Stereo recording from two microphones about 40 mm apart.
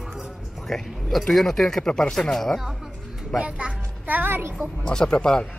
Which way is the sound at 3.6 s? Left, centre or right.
Right.